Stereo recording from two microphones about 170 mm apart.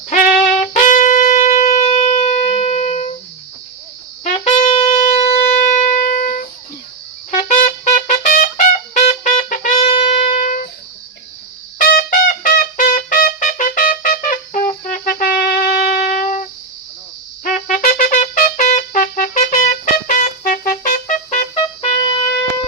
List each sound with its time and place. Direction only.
0.1 s wind instrument: 50° left (ahead or behind)
4.2 s wind instrument: 35° left (ahead or behind)
7.3 s trumpet: 50° left (ahead or behind)
9.0 s music: 50° left (ahead or behind)
9.9 s music: 35° left (ahead or behind)
10.3 s music: 50° left (ahead or behind)
11.8 s trumpet: 55° left (ahead or behind)
14.7 s wind instrument: 50° left (ahead or behind)
17.4 s trumpet: 50° left (ahead or behind)